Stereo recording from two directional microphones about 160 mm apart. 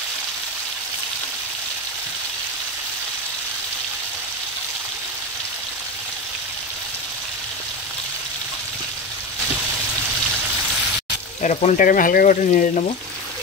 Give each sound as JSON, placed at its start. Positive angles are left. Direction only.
{"t": 11.4, "sound": "speech", "side_deg": 50}